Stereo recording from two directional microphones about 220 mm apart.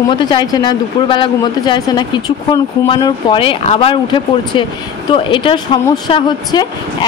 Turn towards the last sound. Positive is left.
turn(degrees=20)  # may be behind; listen again after turning